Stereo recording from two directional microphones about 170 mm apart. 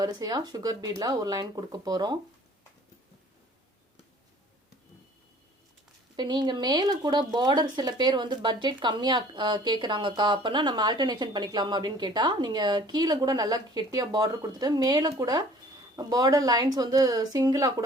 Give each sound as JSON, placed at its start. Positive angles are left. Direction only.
{"t": 0.0, "sound": "speech", "side_deg": -25}
{"t": 6.1, "sound": "speech", "side_deg": -25}